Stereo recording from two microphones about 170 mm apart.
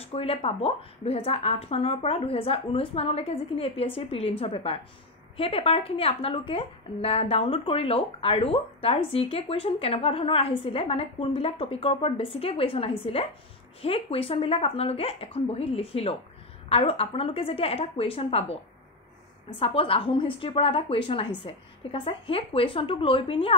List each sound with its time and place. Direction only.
0.0 s a woman's voice: 35° left (ahead or behind)
19.6 s a woman's voice: 35° left (ahead or behind)